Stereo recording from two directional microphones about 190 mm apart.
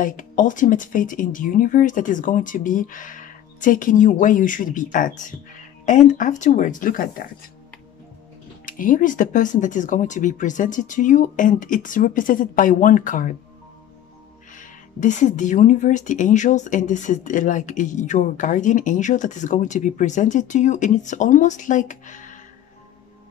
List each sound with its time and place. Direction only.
0.0 s speech: 45° left (ahead or behind)
8.6 s speech: 45° left (ahead or behind)
14.6 s speech: 40° left (ahead or behind)